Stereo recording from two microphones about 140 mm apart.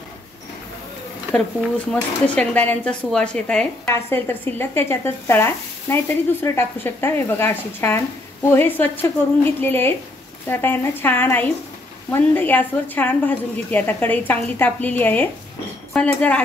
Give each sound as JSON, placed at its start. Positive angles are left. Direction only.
{"t": 1.9, "sound": "speech", "side_deg": 10}
{"t": 3.8, "sound": "speech", "side_deg": 15}